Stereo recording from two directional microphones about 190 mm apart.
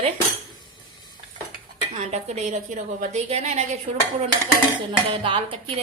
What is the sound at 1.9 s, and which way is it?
A woman's voice, 35° right (ahead or behind).